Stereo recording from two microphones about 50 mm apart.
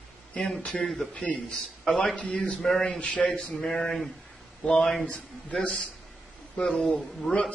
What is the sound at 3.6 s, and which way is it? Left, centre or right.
A man's voice, centre.